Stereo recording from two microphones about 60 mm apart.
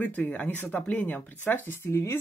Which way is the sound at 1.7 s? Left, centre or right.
Left.